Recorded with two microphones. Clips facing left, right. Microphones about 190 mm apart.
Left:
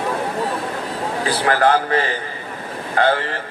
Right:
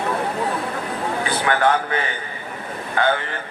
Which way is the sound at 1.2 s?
35° left (ahead or behind).